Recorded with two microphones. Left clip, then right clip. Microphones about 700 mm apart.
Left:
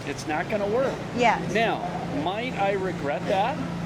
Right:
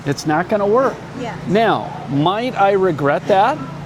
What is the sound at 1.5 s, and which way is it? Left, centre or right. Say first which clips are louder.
Speech: right 9 dB; right.